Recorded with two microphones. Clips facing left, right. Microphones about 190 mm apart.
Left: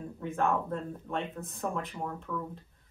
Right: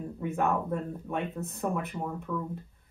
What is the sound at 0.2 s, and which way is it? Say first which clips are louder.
Speech: right 1 dB; 10° right (ahead or behind).